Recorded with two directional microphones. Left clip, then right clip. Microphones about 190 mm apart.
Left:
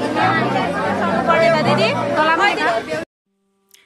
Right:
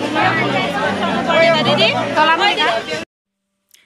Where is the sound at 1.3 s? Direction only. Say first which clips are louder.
Right 2 dB; 5° left (ahead or behind).